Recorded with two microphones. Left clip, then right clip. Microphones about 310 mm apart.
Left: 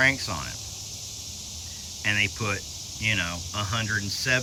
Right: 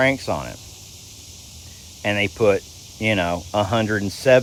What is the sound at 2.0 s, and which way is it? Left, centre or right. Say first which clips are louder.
Speech: right 7 dB; centre.